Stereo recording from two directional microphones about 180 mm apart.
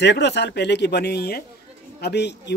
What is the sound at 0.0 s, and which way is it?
Speech, 75° left (ahead or behind).